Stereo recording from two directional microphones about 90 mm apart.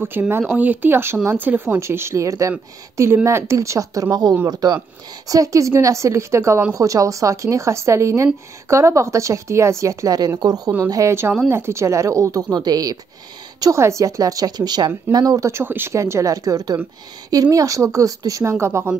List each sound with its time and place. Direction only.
0.0 s speech: 25° right (ahead or behind)
1.8 s a woman's voice: 30° right (ahead or behind); by 10.7 s 45° right (ahead or behind)
10.9 s a woman's voice: 35° right (ahead or behind)
13.6 s a woman's voice: 35° right (ahead or behind)
15.1 s a woman's voice: 40° right (ahead or behind)
15.6 s a woman's voice: 25° right (ahead or behind)